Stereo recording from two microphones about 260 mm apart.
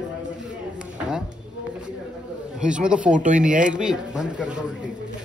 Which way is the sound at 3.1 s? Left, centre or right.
Right.